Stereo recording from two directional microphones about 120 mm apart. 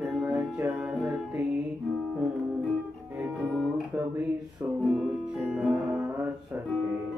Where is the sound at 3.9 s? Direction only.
15° right (ahead or behind).